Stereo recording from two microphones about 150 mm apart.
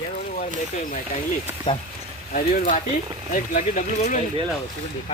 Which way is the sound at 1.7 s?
35° left (ahead or behind).